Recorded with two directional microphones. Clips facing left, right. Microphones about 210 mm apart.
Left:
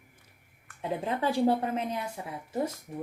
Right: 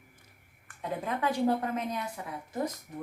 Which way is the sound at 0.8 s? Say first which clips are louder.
Left 2 dB; 30° left (ahead or behind).